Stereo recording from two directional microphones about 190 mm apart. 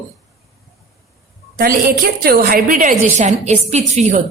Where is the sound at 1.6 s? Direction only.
50° right (ahead or behind).